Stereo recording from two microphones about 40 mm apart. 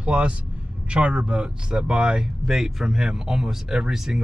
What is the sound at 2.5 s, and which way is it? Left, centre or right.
Speech, centre.